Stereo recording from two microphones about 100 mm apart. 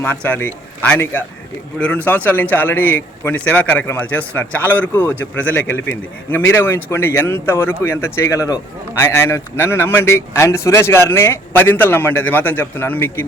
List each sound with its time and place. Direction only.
0.0 s a man's voice: 15° left (ahead or behind)